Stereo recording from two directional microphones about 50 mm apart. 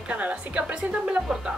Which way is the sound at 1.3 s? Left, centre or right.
Centre.